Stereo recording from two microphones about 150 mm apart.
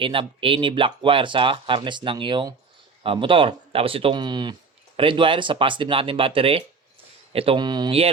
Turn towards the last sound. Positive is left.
turn(degrees=-30)  # may be behind; listen again after turning